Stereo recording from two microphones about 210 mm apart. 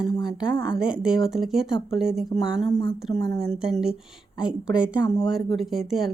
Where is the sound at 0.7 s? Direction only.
5° right (ahead or behind).